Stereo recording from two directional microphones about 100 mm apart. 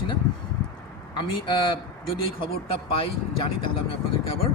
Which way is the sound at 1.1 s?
55° left (ahead or behind).